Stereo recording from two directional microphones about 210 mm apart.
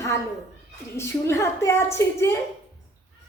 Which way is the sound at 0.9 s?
10° left (ahead or behind).